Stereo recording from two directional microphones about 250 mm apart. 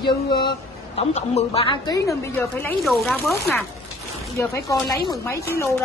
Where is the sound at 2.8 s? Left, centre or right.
Centre.